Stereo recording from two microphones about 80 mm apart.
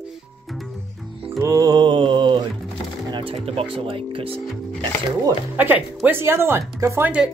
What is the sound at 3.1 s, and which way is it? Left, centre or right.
Speech, right.